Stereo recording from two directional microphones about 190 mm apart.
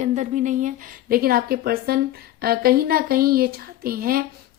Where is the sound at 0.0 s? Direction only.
40° right (ahead or behind).